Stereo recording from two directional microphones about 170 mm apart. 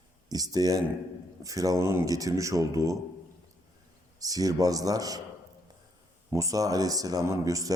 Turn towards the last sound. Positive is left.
turn(degrees=-20)  # may be behind; listen again after turning